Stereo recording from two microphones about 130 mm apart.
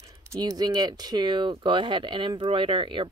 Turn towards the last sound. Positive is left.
turn(degrees=-40)  # may be behind; listen again after turning